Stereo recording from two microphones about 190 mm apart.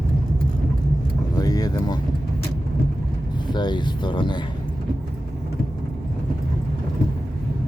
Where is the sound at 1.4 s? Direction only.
20° left (ahead or behind).